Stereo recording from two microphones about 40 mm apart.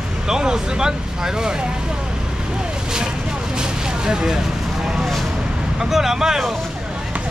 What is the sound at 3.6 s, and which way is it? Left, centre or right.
Vehicle, centre.